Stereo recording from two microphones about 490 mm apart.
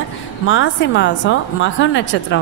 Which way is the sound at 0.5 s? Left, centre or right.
Left.